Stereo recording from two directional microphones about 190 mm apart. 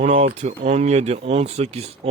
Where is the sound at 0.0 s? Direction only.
30° right (ahead or behind).